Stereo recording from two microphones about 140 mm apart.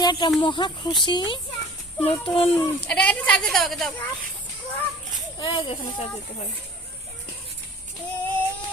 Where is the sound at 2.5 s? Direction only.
10° left (ahead or behind).